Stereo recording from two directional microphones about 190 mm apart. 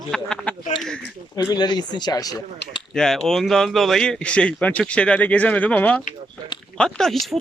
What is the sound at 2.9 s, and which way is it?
Speech, 5° left (ahead or behind).